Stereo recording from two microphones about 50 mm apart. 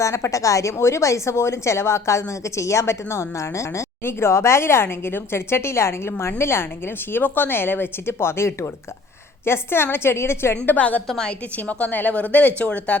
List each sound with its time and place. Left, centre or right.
0.0 s a woman's voice: left
10.8 s a woman's voice: left